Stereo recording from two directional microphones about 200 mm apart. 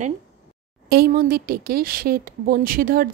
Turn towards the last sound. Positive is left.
turn(degrees=-45)  # may be behind; listen again after turning